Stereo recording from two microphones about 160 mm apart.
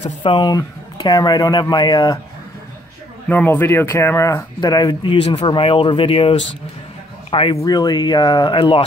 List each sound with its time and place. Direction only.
0.2 s speech: 30° left (ahead or behind)
3.3 s speech: 10° left (ahead or behind); by 8.8 s 30° left (ahead or behind)